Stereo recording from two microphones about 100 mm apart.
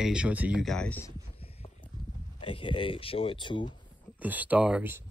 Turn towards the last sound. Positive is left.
turn(degrees=-15)  # may be behind; listen again after turning